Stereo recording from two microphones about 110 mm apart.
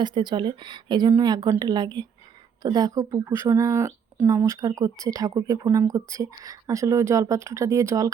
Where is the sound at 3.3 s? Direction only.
20° right (ahead or behind).